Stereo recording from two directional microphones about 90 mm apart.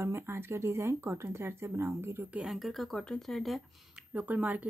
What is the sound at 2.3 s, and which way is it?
Speech, 5° right (ahead or behind).